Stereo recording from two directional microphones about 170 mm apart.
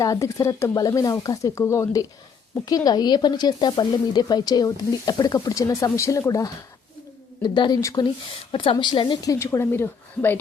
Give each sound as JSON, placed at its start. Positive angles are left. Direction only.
{"t": 0.0, "sound": "speech", "side_deg": 20}